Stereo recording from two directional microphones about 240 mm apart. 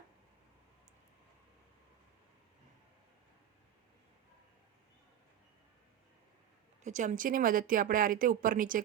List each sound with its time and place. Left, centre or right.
6.8 s speech: right